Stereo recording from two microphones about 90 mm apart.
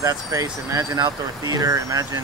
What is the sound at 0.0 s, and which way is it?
Speech, 40° right (ahead or behind).